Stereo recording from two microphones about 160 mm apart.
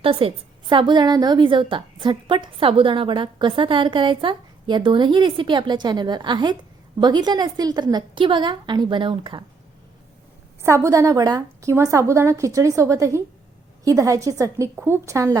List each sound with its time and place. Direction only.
0.0 s a woman's voice: 35° right (ahead or behind)
10.6 s a woman's voice: 15° right (ahead or behind)